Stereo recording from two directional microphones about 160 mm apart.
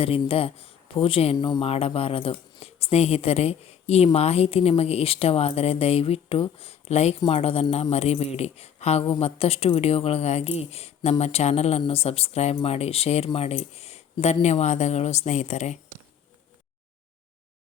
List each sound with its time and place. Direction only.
0.0 s speech: 35° left (ahead or behind)